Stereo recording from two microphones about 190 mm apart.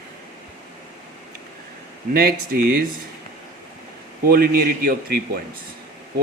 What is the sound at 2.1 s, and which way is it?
Speech, 55° right (ahead or behind).